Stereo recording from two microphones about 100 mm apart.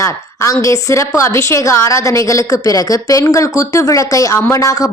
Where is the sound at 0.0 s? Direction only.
30° left (ahead or behind).